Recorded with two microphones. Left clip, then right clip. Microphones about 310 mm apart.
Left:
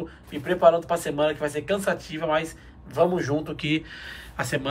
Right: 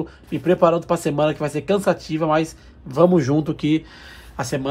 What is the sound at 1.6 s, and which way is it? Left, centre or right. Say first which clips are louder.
A man's voice: right 9 dB; centre.